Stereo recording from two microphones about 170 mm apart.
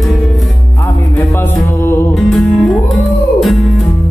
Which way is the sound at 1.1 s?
15° left (ahead or behind).